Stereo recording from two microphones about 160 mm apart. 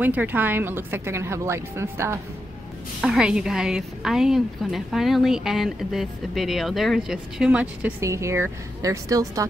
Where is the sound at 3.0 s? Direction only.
5° right (ahead or behind).